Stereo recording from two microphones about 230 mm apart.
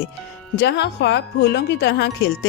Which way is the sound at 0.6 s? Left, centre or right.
Left.